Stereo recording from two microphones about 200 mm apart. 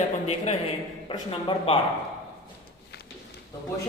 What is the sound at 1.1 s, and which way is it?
Speech, 25° left (ahead or behind).